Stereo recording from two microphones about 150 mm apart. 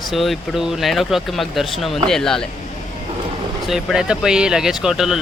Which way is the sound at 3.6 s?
5° right (ahead or behind).